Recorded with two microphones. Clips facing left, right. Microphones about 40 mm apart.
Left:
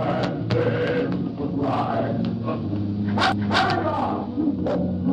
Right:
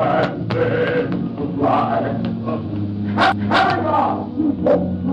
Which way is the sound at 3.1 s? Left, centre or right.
Right.